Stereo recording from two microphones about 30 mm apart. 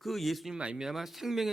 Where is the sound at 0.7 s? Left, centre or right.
Right.